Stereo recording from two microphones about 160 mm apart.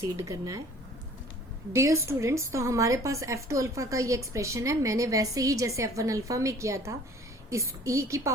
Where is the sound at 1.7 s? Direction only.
20° right (ahead or behind).